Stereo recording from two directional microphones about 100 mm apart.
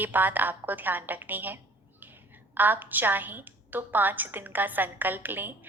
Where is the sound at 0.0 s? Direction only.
20° right (ahead or behind).